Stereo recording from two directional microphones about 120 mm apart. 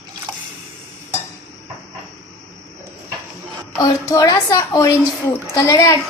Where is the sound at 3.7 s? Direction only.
30° left (ahead or behind).